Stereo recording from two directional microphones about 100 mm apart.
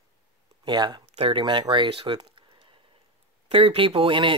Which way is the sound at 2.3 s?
65° right (ahead or behind).